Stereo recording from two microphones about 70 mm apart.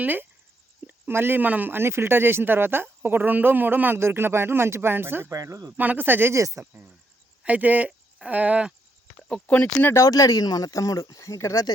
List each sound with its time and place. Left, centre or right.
0.0 s speech: right
5.3 s speech: right
5.7 s speech: right
6.3 s speech: right
7.4 s speech: right
9.5 s speech: left
10.0 s speech: left